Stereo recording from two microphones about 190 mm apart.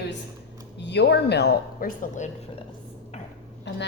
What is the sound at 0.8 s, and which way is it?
Speech, 65° left (ahead or behind).